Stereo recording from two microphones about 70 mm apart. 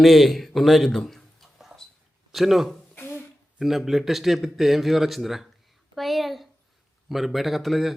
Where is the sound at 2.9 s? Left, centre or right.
Left.